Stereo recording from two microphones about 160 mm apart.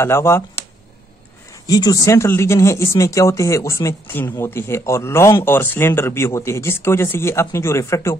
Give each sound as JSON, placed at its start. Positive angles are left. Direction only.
{"t": 0.0, "sound": "speech", "side_deg": 15}
{"t": 1.7, "sound": "speech", "side_deg": 25}